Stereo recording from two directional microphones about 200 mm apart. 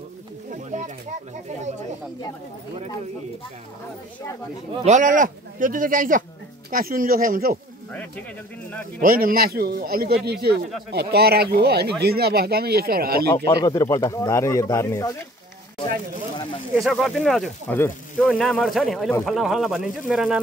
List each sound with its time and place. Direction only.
0.7 s a sound: 35° right (ahead or behind)
4.8 s a man's voice: 40° right (ahead or behind)
9.0 s a man's voice: 45° right (ahead or behind)
13.3 s speech: 20° left (ahead or behind)
16.7 s speech: centre (ahead or behind)